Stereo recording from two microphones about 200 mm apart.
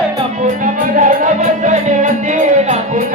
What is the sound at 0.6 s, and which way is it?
Music, 40° right (ahead or behind).